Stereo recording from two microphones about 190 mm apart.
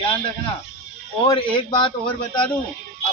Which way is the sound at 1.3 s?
25° left (ahead or behind).